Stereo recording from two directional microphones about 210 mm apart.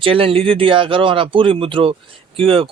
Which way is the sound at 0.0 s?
25° right (ahead or behind).